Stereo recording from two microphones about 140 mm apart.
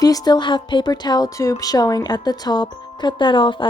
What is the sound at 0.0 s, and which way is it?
A woman's voice, 25° left (ahead or behind).